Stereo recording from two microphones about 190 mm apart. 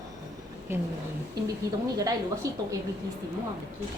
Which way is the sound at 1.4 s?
20° right (ahead or behind).